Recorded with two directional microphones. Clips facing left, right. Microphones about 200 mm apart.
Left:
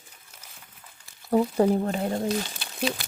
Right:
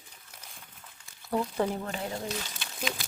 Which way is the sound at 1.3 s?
40° left (ahead or behind).